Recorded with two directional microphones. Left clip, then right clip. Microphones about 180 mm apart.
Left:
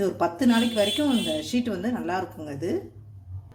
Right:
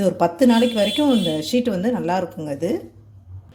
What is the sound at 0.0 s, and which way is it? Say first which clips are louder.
Speech: right 7 dB; 55° right (ahead or behind).